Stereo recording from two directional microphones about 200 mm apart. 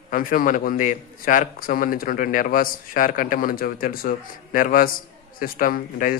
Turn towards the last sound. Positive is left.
turn(degrees=45)  # may be behind; listen again after turning